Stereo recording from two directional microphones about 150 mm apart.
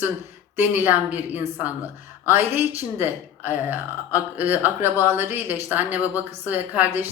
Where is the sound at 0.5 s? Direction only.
15° right (ahead or behind).